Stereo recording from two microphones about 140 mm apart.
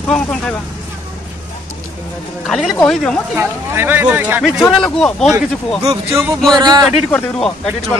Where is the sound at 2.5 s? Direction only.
Centre (ahead or behind).